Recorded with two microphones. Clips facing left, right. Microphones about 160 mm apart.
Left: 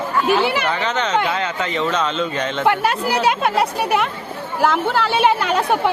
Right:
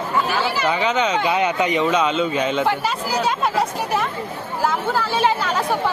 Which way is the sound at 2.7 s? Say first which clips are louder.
Left 4 dB; 60° left (ahead or behind).